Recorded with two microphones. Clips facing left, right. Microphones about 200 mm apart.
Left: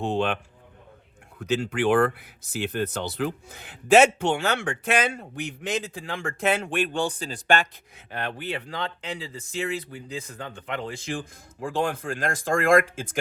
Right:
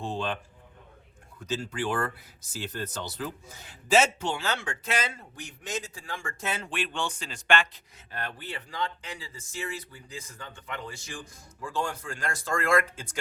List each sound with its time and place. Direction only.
0.0 s a man's voice: 70° left (ahead or behind)
1.4 s speech: 65° left (ahead or behind)
6.7 s speech: 40° left (ahead or behind)
7.9 s speech: 65° left (ahead or behind)
11.9 s speech: 55° left (ahead or behind)
12.8 s speech: 90° left